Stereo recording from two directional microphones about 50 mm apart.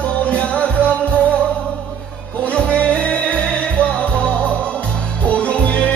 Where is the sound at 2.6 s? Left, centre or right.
Left.